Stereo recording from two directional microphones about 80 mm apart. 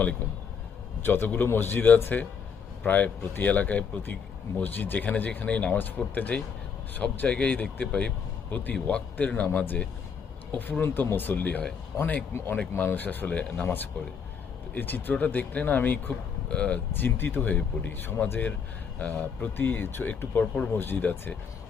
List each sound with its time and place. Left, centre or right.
1.0 s speech: left
14.8 s speech: left